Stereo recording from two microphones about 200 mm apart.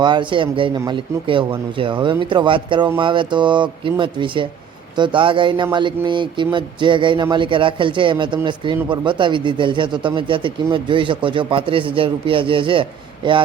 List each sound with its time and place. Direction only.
0.0 s speech: 25° right (ahead or behind)